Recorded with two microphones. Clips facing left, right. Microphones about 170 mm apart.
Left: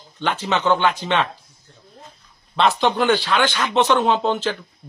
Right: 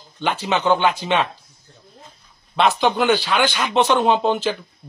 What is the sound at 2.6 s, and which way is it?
A man's voice, 5° right (ahead or behind).